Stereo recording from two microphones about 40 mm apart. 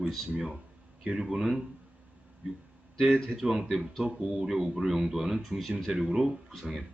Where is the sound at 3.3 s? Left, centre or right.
Centre.